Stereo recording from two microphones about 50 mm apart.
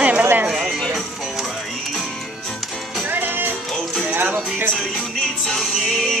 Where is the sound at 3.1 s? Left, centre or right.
Right.